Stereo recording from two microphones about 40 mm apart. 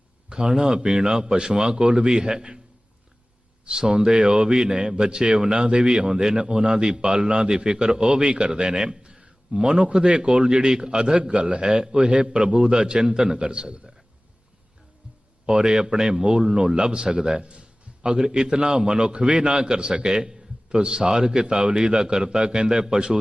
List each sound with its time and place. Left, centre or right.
0.3 s a man's voice: right
1.8 s a man's voice: right
2.0 s a man's voice: centre
3.7 s a man's voice: right
8.1 s a man's voice: right
15.4 s a man's voice: right